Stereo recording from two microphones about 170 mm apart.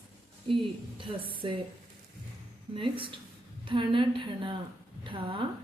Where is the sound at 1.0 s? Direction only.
30° right (ahead or behind).